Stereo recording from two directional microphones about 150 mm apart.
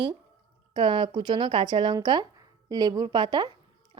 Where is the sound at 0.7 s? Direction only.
30° right (ahead or behind).